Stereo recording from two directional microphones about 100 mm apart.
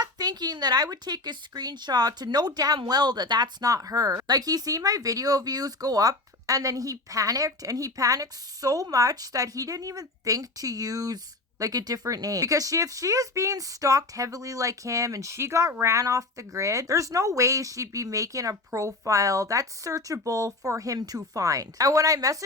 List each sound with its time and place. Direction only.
0.0 s a woman's voice: 40° right (ahead or behind)